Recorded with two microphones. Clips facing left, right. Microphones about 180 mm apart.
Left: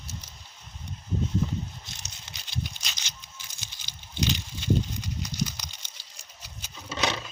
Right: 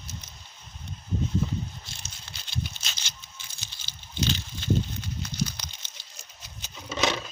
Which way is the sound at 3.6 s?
15° left (ahead or behind).